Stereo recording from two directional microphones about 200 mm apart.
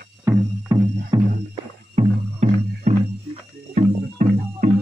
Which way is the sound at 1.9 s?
35° right (ahead or behind).